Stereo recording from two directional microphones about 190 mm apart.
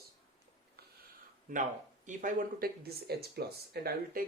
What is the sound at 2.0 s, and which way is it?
Speech, 45° right (ahead or behind).